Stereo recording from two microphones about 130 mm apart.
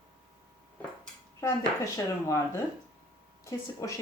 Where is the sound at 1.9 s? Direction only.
25° left (ahead or behind).